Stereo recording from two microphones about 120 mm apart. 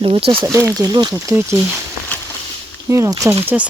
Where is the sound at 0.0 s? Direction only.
45° right (ahead or behind).